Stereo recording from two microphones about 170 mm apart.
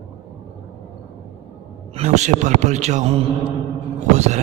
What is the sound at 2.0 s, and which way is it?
Speech, 45° right (ahead or behind).